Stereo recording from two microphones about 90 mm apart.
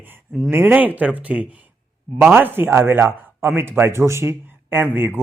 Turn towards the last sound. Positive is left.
turn(degrees=-25)  # may be behind; listen again after turning